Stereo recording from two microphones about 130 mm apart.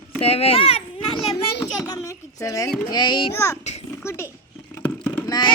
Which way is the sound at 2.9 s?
35° left (ahead or behind).